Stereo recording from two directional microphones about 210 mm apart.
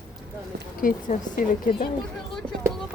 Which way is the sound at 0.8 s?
40° left (ahead or behind).